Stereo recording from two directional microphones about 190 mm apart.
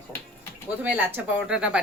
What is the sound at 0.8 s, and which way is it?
Speech, 10° right (ahead or behind).